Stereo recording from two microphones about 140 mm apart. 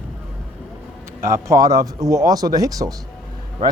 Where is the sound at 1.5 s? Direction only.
25° right (ahead or behind).